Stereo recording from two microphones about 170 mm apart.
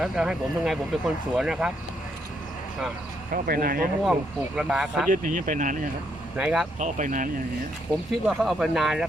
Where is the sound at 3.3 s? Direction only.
60° right (ahead or behind).